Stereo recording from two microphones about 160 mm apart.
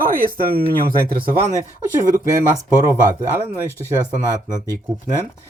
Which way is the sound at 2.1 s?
15° right (ahead or behind).